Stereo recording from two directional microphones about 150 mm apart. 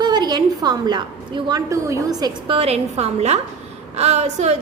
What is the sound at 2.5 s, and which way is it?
A woman's voice, 40° right (ahead or behind).